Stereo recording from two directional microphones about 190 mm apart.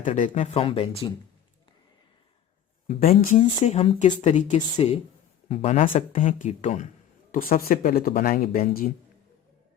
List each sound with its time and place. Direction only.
0.0 s speech: 40° left (ahead or behind)
2.8 s a man's voice: 35° left (ahead or behind); by 8.9 s 50° left (ahead or behind)